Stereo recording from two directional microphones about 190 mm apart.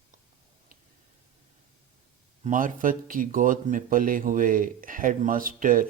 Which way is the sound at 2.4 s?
45° right (ahead or behind).